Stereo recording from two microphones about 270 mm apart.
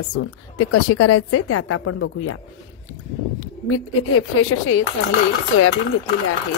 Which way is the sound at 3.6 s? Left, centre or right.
Left.